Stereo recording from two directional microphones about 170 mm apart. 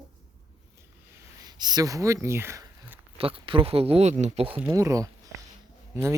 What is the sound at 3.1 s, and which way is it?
Speech, 30° right (ahead or behind).